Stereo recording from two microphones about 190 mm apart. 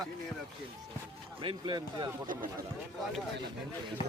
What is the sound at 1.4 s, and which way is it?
Speech, 25° right (ahead or behind).